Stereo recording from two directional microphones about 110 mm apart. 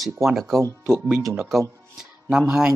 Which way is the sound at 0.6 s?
30° right (ahead or behind).